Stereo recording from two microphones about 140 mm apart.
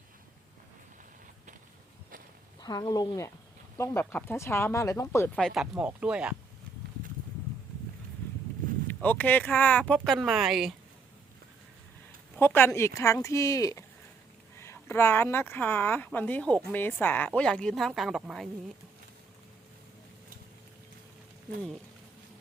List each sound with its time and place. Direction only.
2.6 s speech: 30° left (ahead or behind); by 6.3 s 5° right (ahead or behind)
8.9 s speech: 10° left (ahead or behind)
12.4 s speech: 15° left (ahead or behind); by 18.4 s centre (ahead or behind)